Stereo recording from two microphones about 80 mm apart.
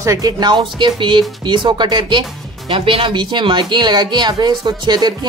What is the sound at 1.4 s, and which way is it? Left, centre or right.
Speech, right.